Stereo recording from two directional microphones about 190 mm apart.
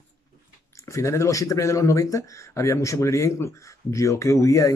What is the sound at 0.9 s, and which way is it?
Speech, 15° left (ahead or behind).